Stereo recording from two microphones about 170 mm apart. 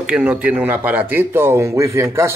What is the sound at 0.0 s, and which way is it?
A man's voice, 10° right (ahead or behind).